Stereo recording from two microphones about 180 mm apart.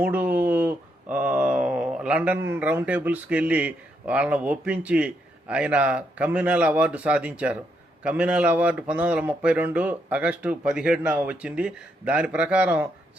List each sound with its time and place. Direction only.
0.0 s speech: 10° right (ahead or behind)